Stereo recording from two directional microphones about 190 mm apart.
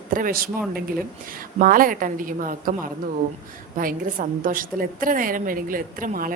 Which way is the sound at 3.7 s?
45° right (ahead or behind).